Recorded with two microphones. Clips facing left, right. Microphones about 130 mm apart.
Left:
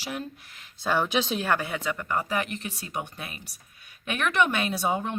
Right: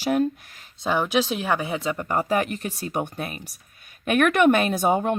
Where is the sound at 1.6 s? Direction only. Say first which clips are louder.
Right 4 dB; 25° right (ahead or behind).